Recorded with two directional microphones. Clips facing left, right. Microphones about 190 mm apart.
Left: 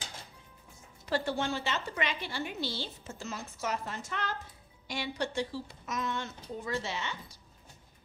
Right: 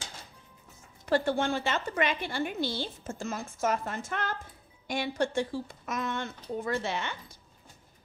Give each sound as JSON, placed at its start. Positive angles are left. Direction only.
{"t": 1.0, "sound": "a woman's voice", "side_deg": -50}